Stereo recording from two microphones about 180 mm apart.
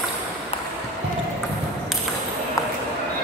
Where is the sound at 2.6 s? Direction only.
20° left (ahead or behind).